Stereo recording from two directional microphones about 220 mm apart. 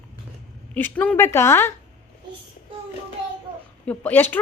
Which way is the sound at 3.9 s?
10° left (ahead or behind).